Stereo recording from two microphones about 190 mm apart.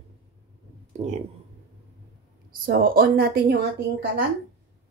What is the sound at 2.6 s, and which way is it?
Speech, 50° right (ahead or behind).